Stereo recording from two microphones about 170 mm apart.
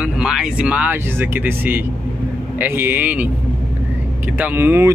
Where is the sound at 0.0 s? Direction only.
5° right (ahead or behind).